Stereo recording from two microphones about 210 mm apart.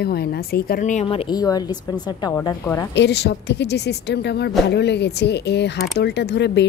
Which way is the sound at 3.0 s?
55° left (ahead or behind).